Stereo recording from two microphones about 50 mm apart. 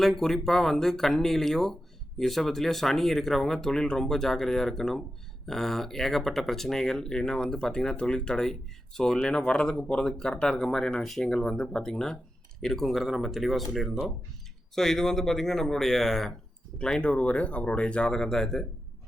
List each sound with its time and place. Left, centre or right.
0.0 s speech: centre
17.0 s speech: left
18.1 s speech: centre